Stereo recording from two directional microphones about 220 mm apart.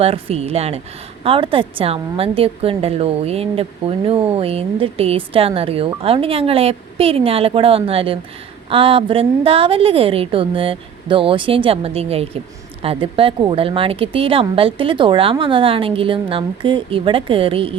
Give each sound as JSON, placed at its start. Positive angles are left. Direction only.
{"t": 0.0, "sound": "a woman's voice", "side_deg": -25}